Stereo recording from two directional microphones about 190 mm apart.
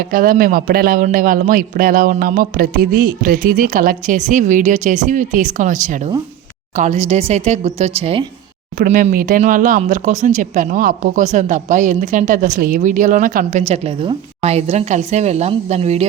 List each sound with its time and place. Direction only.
0.0 s a man's voice: 50° right (ahead or behind); by 8.2 s 35° right (ahead or behind)
8.8 s speech: 45° right (ahead or behind)